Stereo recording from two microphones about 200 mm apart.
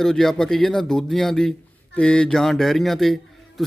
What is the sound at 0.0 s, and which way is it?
A man's voice, centre (ahead or behind).